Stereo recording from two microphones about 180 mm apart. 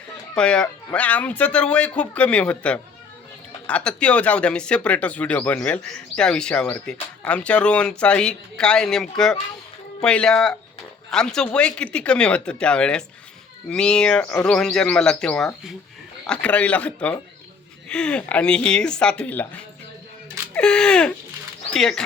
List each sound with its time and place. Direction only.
0.3 s speech: 5° left (ahead or behind)
20.5 s speech: 5° left (ahead or behind)